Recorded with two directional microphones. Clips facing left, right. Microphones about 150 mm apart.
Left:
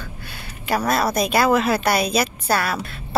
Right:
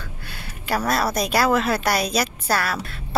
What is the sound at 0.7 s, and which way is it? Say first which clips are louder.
Speech: left 2 dB; centre (ahead or behind).